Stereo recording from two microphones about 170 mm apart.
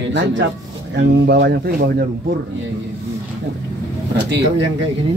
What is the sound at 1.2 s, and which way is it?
Speech, 75° right (ahead or behind).